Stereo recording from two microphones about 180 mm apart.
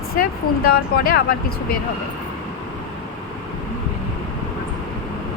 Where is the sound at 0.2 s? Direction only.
55° left (ahead or behind).